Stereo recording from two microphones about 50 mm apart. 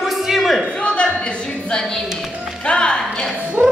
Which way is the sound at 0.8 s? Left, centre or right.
Left.